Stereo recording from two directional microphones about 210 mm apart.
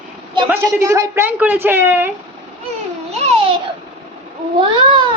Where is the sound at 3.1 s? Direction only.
30° right (ahead or behind).